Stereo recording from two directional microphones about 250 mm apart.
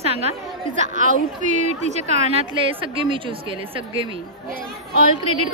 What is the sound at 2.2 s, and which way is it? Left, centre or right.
A woman's voice, right.